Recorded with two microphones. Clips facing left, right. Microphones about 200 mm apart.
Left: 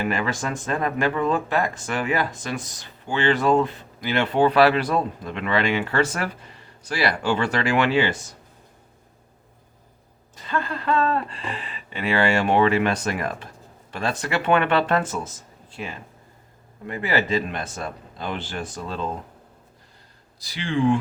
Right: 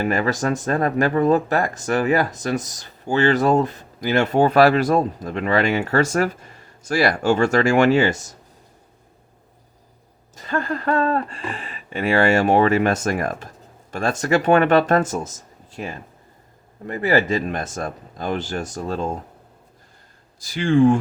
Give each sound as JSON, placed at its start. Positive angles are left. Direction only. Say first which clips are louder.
{"t": 0.0, "sound": "speech", "louder": "right 4 dB", "side_deg": -40}
{"t": 10.3, "sound": "speech", "louder": "right 3 dB", "side_deg": -45}
{"t": 20.4, "sound": "speech", "louder": "right 7 dB", "side_deg": -45}